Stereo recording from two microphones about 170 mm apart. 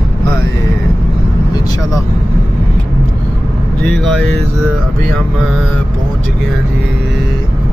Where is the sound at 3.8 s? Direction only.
5° left (ahead or behind).